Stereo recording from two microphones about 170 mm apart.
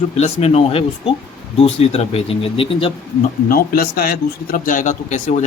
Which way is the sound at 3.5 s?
60° left (ahead or behind).